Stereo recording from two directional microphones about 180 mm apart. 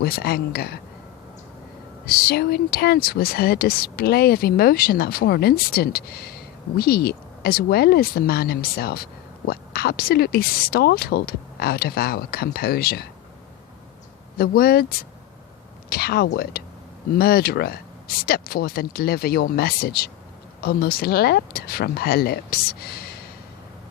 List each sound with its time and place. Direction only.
0.0 s speech: 60° left (ahead or behind)
2.0 s speech: 55° left (ahead or behind)
14.3 s speech: 60° left (ahead or behind)